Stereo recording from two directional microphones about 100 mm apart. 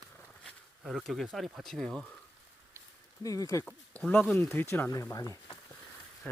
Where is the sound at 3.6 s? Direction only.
10° left (ahead or behind).